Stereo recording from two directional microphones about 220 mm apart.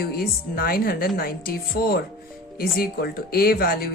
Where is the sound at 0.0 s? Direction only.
45° left (ahead or behind).